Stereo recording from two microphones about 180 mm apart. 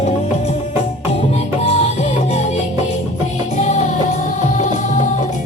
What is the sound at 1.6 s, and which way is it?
Music, 35° left (ahead or behind).